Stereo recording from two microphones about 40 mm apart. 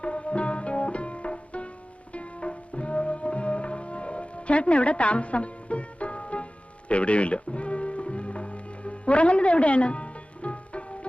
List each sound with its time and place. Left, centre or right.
0.0 s music: left